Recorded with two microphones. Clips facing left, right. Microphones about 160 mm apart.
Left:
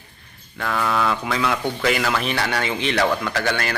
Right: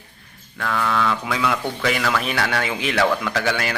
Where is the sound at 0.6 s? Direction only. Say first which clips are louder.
Even; 5° left (ahead or behind).